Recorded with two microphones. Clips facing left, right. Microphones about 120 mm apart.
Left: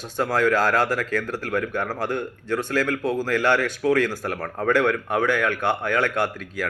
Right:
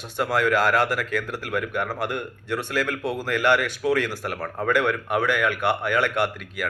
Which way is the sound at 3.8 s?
15° right (ahead or behind).